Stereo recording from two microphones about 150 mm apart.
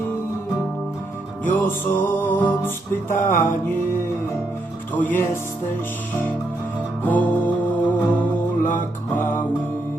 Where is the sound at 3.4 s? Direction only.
15° left (ahead or behind).